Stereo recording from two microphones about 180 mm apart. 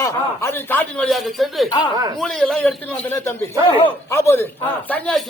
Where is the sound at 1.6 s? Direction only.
25° left (ahead or behind).